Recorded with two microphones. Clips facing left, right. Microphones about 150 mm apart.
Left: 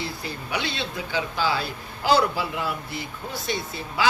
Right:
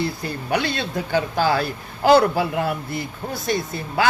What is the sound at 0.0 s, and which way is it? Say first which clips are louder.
Speech: right 6 dB; 50° right (ahead or behind).